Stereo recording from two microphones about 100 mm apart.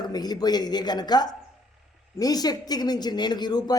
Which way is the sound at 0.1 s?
40° left (ahead or behind).